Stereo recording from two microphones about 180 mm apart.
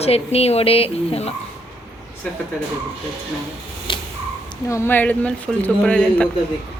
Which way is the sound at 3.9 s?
25° left (ahead or behind).